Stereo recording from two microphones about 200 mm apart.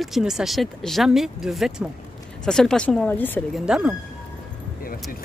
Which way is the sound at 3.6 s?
5° right (ahead or behind).